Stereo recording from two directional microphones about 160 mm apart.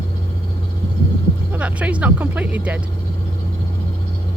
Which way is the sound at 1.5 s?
10° right (ahead or behind).